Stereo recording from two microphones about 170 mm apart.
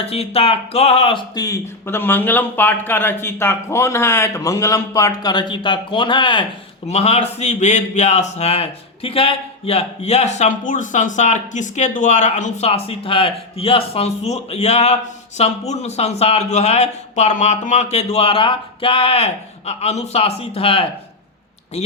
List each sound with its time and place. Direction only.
0.0 s speech: 35° left (ahead or behind)
6.8 s a man's voice: 40° left (ahead or behind)